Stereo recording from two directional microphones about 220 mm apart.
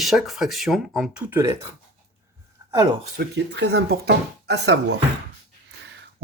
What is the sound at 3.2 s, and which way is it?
Speech, 50° right (ahead or behind).